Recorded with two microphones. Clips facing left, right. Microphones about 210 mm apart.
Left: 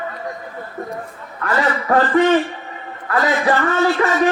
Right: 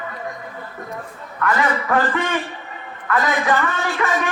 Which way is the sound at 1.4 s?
35° left (ahead or behind).